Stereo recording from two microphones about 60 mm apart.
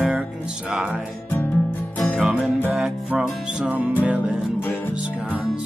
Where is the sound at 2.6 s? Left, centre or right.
Right.